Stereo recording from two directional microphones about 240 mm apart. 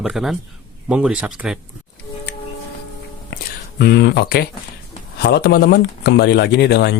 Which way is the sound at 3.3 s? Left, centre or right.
Left.